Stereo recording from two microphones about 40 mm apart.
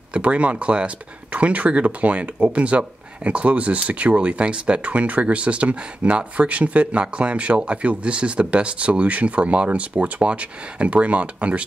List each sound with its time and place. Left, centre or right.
0.1 s speech: right